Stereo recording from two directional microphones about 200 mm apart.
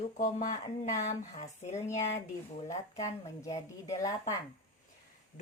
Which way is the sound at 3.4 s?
15° left (ahead or behind).